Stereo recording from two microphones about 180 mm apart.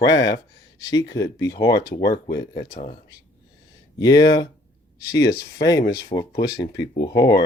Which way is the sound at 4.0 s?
20° left (ahead or behind).